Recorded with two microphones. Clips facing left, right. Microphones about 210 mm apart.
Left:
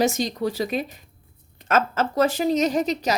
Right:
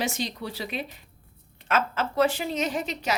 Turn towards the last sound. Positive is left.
turn(degrees=40)  # may be behind; listen again after turning